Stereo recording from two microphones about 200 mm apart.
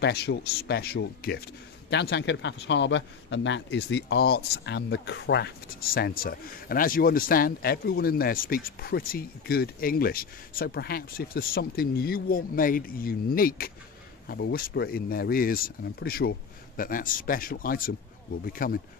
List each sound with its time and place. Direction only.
0.0 s a man's voice: 55° left (ahead or behind)